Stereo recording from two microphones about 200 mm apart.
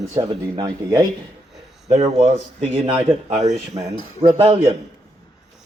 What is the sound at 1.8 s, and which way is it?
Speech, 35° right (ahead or behind).